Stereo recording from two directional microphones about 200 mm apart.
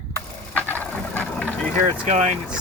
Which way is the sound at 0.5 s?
5° left (ahead or behind).